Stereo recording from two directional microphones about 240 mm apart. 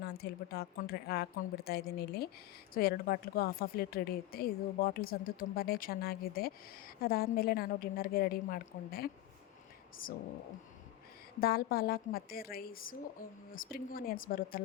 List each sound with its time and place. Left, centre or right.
0.0 s speech: left
11.3 s speech: left